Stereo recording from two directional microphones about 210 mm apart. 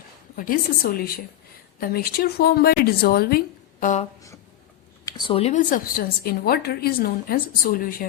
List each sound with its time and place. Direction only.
0.3 s a woman's voice: 40° left (ahead or behind)
5.0 s a woman's voice: 20° left (ahead or behind); by 8.0 s 40° left (ahead or behind)